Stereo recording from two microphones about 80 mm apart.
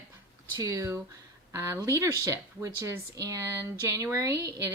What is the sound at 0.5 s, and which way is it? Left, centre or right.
Speech, right.